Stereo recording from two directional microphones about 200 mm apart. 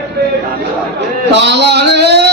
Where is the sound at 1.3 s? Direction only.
60° right (ahead or behind).